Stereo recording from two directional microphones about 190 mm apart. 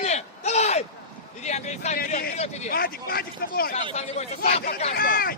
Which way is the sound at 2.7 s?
50° left (ahead or behind).